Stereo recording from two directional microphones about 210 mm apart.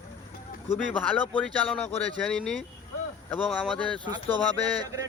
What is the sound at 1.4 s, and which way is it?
Speech, 5° left (ahead or behind).